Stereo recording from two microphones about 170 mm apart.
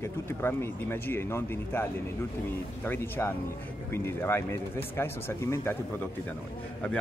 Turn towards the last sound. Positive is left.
turn(degrees=15)  # may be behind; listen again after turning